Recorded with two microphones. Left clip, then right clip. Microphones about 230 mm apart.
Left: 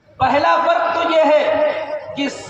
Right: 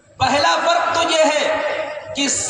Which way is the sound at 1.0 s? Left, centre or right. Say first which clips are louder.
Left 2 dB; right.